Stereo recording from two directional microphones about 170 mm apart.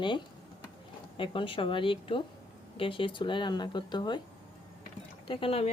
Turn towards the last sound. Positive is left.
turn(degrees=35)  # may be behind; listen again after turning